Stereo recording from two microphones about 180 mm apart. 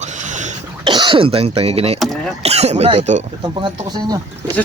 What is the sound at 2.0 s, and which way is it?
Speech, centre (ahead or behind).